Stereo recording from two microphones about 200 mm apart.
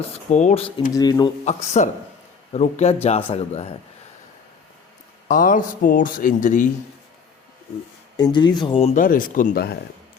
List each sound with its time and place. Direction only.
0.1 s speech: 35° left (ahead or behind)
0.9 s speech: 20° left (ahead or behind)
1.5 s speech: 35° left (ahead or behind)
5.3 s speech: 40° left (ahead or behind)
8.1 s speech: 25° left (ahead or behind)
9.0 s speech: 45° left (ahead or behind)